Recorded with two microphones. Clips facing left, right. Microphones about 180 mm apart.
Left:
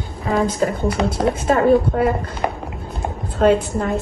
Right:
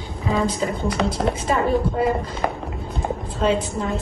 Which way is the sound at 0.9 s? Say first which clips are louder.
Left 3 dB; centre (ahead or behind).